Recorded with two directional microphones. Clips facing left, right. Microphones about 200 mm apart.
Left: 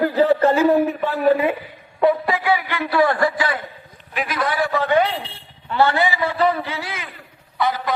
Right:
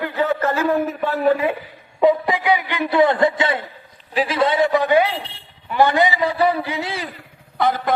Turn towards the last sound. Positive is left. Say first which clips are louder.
# right 2 dB
turn(degrees=-50)  # may be behind; listen again after turning